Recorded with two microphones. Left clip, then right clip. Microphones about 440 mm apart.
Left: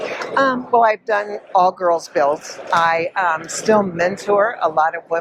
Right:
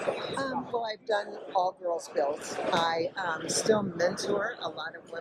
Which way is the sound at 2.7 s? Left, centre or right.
Left.